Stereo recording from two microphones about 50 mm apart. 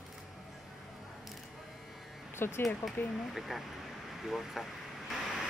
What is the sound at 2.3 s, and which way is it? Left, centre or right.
Speech, left.